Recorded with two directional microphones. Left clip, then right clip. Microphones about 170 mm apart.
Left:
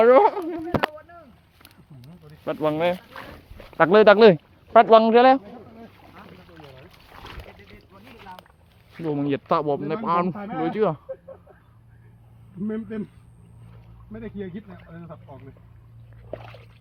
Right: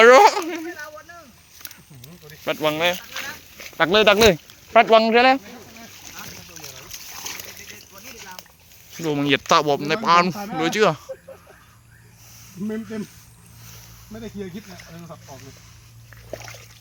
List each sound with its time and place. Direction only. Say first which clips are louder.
0.0 s speech: right 4 dB; centre (ahead or behind)
2.5 s speech: right 2 dB; 15° left (ahead or behind)
2.7 s speech: right 2 dB; 30° left (ahead or behind); by 5.4 s 10° left (ahead or behind)
6.7 s boat: right 9 dB; centre (ahead or behind)
9.1 s speech: right 6 dB; 10° right (ahead or behind)
12.6 s speech: right 1 dB; 15° right (ahead or behind)
14.1 s speech: right 1 dB; 15° right (ahead or behind)
16.3 s splash: right 2 dB; 10° right (ahead or behind)